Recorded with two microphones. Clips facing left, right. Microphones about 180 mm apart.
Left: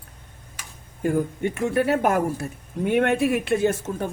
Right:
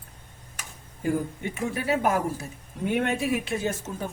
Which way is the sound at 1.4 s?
60° left (ahead or behind).